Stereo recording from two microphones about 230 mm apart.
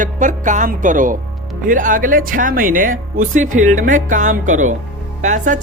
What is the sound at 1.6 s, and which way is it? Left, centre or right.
Speech, right.